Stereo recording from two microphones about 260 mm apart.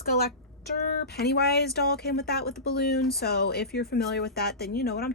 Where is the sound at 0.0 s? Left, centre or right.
Left.